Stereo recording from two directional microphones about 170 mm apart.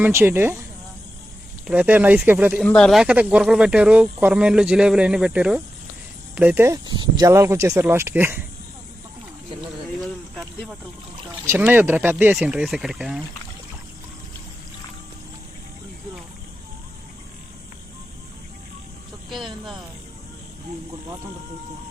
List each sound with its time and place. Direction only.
0.0 s speech: 15° right (ahead or behind)
1.6 s speech: 10° right (ahead or behind)
2.6 s speech: 5° left (ahead or behind); by 8.4 s 15° right (ahead or behind)
10.0 s a sound: centre (ahead or behind)
11.4 s speech: 10° right (ahead or behind)